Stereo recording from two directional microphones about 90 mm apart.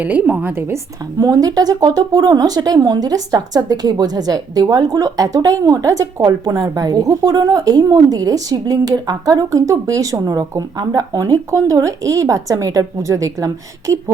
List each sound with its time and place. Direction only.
0.0 s a woman's voice: 15° right (ahead or behind)
1.2 s speech: 40° right (ahead or behind)
6.4 s speech: 50° right (ahead or behind)